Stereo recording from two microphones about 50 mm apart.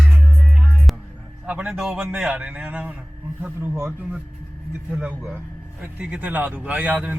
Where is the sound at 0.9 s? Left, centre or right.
Centre.